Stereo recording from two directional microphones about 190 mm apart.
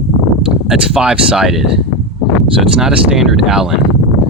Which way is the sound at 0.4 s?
5° right (ahead or behind).